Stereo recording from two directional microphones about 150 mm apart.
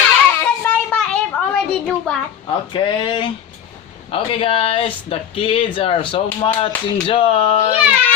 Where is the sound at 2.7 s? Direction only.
30° left (ahead or behind).